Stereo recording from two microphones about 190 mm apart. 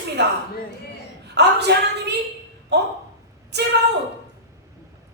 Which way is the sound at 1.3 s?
60° right (ahead or behind).